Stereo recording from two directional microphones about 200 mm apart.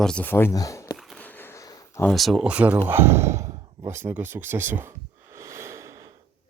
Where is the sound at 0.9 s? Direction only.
Centre (ahead or behind).